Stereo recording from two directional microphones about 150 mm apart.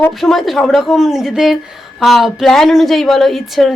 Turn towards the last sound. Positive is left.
turn(degrees=0)  # may be behind; listen again after turning